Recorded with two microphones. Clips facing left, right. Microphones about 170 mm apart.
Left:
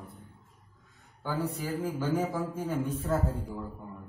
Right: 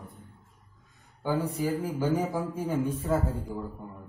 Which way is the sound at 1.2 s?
15° right (ahead or behind).